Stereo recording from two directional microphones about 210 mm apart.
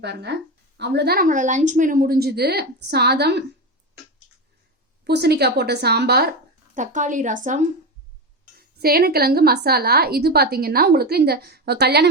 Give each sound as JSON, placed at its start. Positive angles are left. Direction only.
{"t": 0.0, "sound": "speech", "side_deg": -55}
{"t": 5.0, "sound": "speech", "side_deg": -50}
{"t": 6.7, "sound": "a woman's voice", "side_deg": -35}
{"t": 8.5, "sound": "speech", "side_deg": -45}